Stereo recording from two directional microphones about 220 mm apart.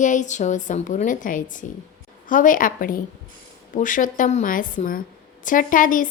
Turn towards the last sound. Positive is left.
turn(degrees=35)  # may be behind; listen again after turning